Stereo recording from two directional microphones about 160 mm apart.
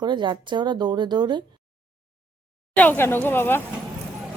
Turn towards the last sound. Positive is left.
turn(degrees=15)  # may be behind; listen again after turning